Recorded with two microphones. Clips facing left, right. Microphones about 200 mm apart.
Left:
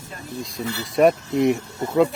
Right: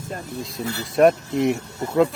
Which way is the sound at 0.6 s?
45° right (ahead or behind).